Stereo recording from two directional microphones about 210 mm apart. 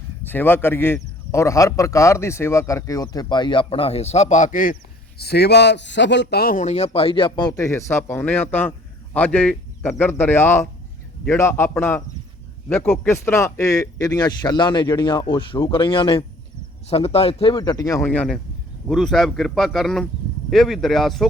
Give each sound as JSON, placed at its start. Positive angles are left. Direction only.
{"t": 0.3, "sound": "a man's voice", "side_deg": 10}